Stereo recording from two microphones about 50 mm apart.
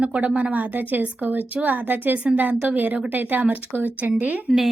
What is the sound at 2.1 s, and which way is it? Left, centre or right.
Speech, right.